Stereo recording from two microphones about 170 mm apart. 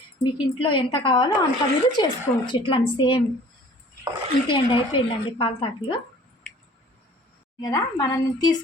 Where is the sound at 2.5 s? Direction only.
30° left (ahead or behind).